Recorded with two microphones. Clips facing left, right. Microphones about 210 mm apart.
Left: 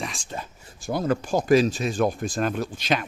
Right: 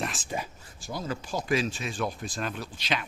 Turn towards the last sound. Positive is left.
turn(degrees=45)  # may be behind; listen again after turning